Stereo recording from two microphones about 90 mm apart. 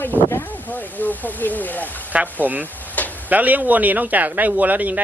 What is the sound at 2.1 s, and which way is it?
A man's voice, 20° right (ahead or behind).